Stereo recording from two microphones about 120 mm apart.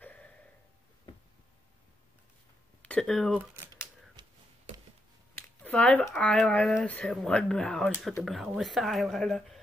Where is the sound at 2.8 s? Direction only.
5° left (ahead or behind).